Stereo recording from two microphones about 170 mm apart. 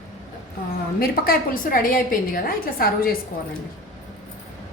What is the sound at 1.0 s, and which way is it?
A woman's voice, 55° left (ahead or behind).